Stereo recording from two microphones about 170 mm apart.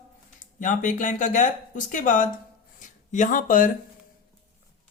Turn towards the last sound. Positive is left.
turn(degrees=55)  # may be behind; listen again after turning